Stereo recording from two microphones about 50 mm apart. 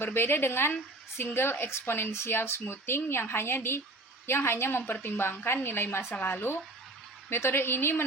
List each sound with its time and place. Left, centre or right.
0.0 s a woman's voice: left